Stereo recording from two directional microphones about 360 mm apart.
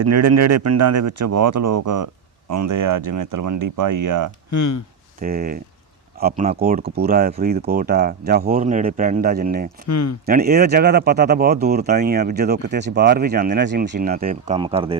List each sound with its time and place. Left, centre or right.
0.0 s speech: right
4.5 s speech: left
5.2 s speech: right
9.8 s speech: left
10.2 s speech: right